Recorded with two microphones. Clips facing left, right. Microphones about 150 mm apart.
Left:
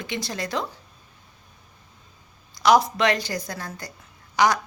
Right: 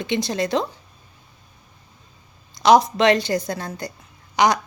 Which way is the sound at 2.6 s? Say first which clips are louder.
Right 4 dB; 20° right (ahead or behind).